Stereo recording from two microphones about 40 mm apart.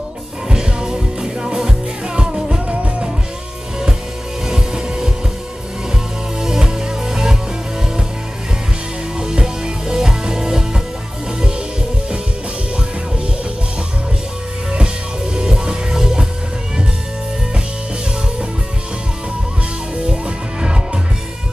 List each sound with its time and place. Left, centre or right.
0.5 s music: centre
2.7 s music: right
4.5 s music: centre
6.4 s music: centre
9.2 s music: centre
15.3 s music: centre
20.0 s music: right